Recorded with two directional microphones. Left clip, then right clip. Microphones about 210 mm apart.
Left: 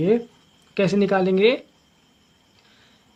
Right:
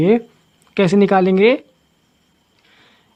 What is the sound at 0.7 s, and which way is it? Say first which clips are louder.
Speech: right 6 dB; 40° right (ahead or behind).